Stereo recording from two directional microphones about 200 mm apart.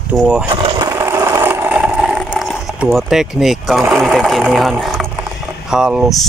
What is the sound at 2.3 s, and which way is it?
Speech, centre (ahead or behind).